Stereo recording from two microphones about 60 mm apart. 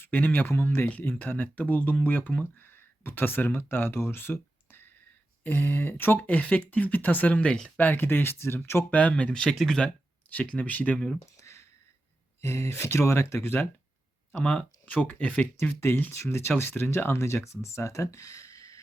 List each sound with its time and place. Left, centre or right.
0.0 s speech: left
0.9 s speech: left
6.4 s speech: left
8.0 s speech: left
8.9 s speech: left
11.3 s a sound: left
12.4 s speech: left
14.4 s speech: centre
16.1 s speech: left